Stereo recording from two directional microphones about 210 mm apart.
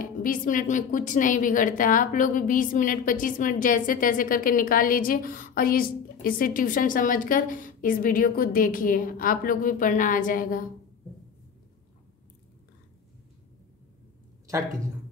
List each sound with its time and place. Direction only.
0.0 s a woman's voice: 40° left (ahead or behind)